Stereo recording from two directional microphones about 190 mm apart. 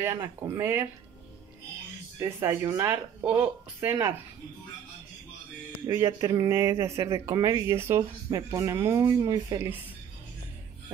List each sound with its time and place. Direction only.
0.0 s speech: 15° right (ahead or behind)
2.1 s speech: 15° right (ahead or behind)
5.9 s speech: 15° right (ahead or behind)